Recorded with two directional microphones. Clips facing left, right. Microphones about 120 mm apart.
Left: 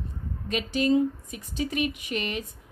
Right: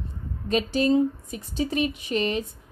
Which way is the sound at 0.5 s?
35° right (ahead or behind).